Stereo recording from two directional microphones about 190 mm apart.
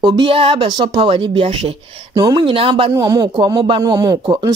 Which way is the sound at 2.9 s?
20° right (ahead or behind).